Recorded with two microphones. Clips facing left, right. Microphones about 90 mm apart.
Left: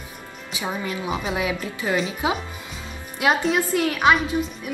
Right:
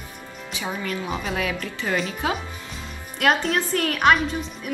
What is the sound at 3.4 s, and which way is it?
Speech, 10° left (ahead or behind).